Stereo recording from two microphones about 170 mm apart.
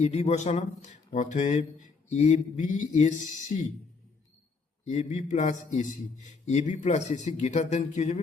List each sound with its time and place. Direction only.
0.0 s a man's voice: 40° left (ahead or behind)
4.9 s a man's voice: 45° left (ahead or behind)